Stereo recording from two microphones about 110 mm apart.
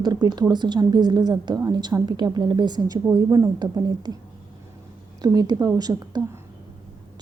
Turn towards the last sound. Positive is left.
turn(degrees=-35)  # may be behind; listen again after turning